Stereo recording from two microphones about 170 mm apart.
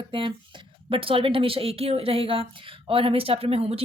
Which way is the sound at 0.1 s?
30° right (ahead or behind).